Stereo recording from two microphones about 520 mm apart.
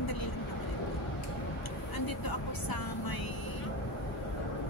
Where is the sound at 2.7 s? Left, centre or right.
Left.